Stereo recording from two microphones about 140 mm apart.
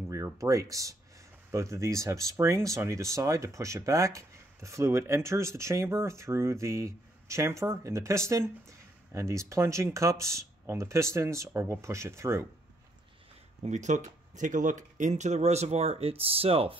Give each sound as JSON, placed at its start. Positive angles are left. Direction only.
{"t": 0.1, "sound": "speech", "side_deg": -25}
{"t": 13.7, "sound": "speech", "side_deg": -60}